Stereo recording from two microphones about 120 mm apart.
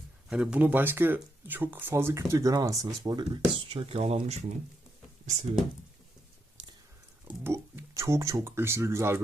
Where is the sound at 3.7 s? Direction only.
50° right (ahead or behind).